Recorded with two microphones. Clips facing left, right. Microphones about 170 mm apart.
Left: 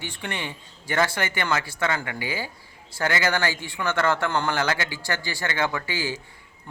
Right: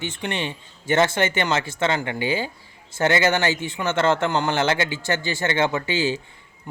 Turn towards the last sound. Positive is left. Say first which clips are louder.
# right 6 dB
turn(degrees=-20)  # may be behind; listen again after turning